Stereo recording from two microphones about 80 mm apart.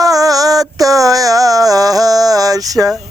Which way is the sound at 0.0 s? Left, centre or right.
Right.